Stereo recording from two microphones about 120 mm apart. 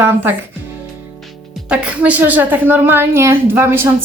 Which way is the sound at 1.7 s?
10° right (ahead or behind).